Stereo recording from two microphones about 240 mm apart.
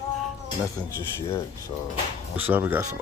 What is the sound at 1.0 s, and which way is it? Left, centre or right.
Speech, centre.